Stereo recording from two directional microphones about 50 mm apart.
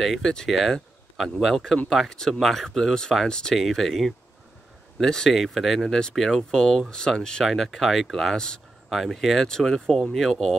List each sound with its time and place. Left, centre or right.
0.2 s speech: centre
0.5 s speech: centre